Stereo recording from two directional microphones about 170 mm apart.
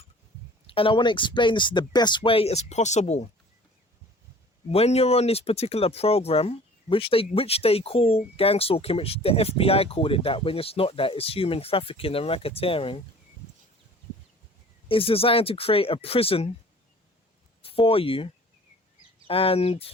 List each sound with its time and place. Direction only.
0.7 s speech: 30° left (ahead or behind)
4.7 s speech: 35° left (ahead or behind)
14.8 s speech: 30° left (ahead or behind)
17.6 s speech: 35° left (ahead or behind)
19.3 s speech: 35° left (ahead or behind)